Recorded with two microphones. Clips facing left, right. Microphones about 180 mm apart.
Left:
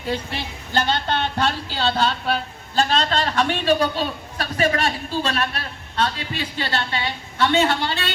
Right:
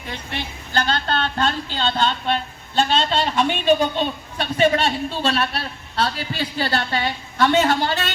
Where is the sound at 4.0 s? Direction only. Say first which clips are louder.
Right 2 dB; 25° right (ahead or behind); by 8.1 s 40° right (ahead or behind).